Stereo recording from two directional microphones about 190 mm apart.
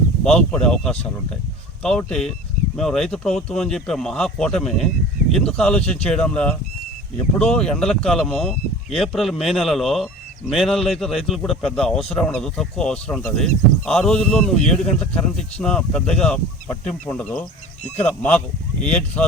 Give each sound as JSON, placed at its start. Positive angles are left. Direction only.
{"t": 0.3, "sound": "speech", "side_deg": 5}